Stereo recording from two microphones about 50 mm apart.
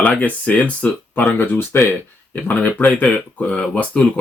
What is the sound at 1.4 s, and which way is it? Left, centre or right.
Speech, left.